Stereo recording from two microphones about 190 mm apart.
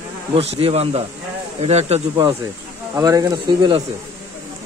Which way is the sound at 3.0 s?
20° right (ahead or behind).